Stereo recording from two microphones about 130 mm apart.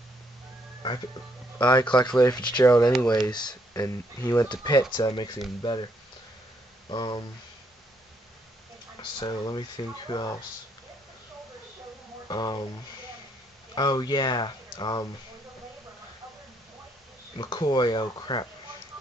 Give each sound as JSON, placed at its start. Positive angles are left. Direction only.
{"t": 1.6, "sound": "speech", "side_deg": 35}
{"t": 2.6, "sound": "speech", "side_deg": 20}
{"t": 3.1, "sound": "speech", "side_deg": 35}
{"t": 6.9, "sound": "speech", "side_deg": 35}
{"t": 9.2, "sound": "speech", "side_deg": 35}
{"t": 12.3, "sound": "speech", "side_deg": 35}
{"t": 13.7, "sound": "speech", "side_deg": 35}
{"t": 17.4, "sound": "speech", "side_deg": 35}